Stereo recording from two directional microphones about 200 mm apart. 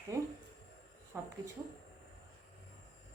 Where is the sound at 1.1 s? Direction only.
10° right (ahead or behind).